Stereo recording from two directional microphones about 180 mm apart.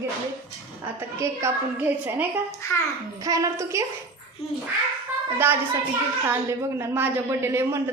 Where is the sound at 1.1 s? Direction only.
15° right (ahead or behind).